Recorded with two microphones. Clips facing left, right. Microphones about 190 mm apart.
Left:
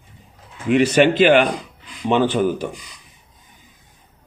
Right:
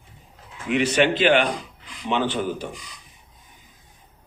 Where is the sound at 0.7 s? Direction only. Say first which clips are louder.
Left 5 dB; 45° left (ahead or behind).